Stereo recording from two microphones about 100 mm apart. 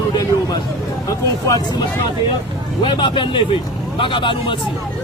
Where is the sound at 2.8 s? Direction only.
55° left (ahead or behind).